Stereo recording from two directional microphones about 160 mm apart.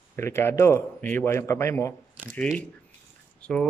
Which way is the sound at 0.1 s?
15° left (ahead or behind).